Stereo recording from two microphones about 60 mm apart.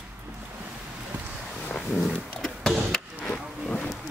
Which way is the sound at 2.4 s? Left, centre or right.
Centre.